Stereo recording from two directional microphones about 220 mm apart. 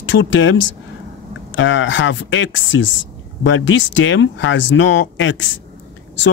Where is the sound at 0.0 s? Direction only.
60° left (ahead or behind).